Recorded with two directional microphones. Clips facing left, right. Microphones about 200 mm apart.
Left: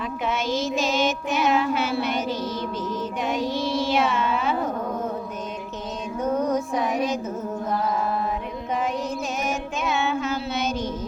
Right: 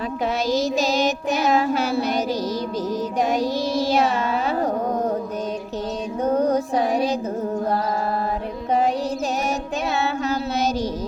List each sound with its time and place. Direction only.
0.3 s child singing: 35° right (ahead or behind)
3.2 s carnatic music: 40° right (ahead or behind)
6.2 s music: 35° right (ahead or behind)
7.7 s mantra: 35° right (ahead or behind)
9.8 s child singing: 35° right (ahead or behind)